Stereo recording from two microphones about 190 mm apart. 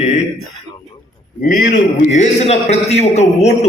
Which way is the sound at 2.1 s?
35° left (ahead or behind).